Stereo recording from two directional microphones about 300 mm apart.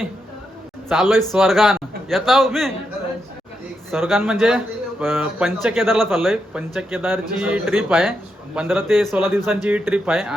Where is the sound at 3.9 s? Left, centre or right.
Centre.